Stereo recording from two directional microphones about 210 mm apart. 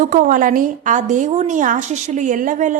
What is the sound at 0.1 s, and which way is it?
A woman's voice, 40° right (ahead or behind).